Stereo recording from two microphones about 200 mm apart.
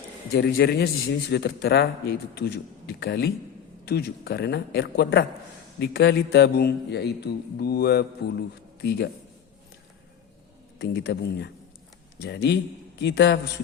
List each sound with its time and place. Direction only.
0.3 s a man's voice: 50° left (ahead or behind)
10.8 s speech: 55° left (ahead or behind)